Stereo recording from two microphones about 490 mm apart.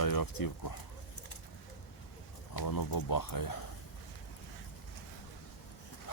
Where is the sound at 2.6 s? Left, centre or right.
Left.